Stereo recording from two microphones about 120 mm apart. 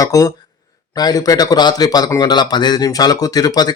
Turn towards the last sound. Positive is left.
turn(degrees=35)  # may be behind; listen again after turning